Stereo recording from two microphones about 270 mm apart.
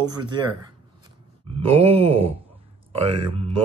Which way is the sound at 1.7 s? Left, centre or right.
Right.